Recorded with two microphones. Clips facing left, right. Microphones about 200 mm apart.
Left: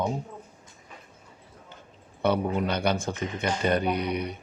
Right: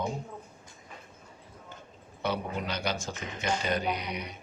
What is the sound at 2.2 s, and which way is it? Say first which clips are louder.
A man's voice: left 7 dB; 60° left (ahead or behind).